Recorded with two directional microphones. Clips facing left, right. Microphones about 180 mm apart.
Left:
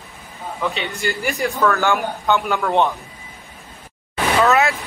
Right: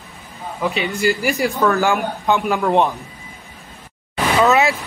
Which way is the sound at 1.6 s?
15° right (ahead or behind).